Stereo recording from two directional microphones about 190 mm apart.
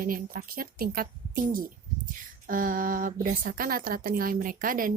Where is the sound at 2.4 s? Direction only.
45° right (ahead or behind).